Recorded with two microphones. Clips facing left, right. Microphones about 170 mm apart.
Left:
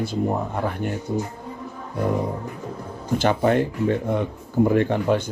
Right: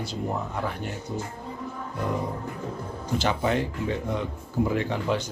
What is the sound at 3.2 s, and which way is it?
Speech, 55° left (ahead or behind).